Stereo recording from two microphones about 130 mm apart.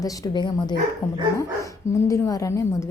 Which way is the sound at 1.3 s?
25° left (ahead or behind).